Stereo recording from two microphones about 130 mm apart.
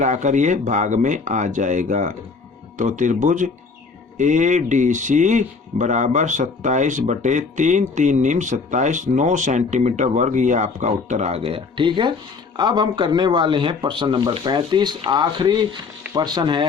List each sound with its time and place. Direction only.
0.0 s speech: 70° right (ahead or behind); by 16.6 s 35° right (ahead or behind)